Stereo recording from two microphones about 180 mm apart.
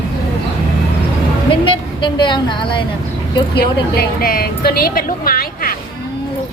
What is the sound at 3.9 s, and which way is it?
A woman's voice, 55° left (ahead or behind).